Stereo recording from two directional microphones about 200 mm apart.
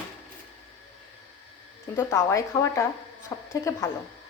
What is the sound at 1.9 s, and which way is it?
A woman's voice, 10° left (ahead or behind).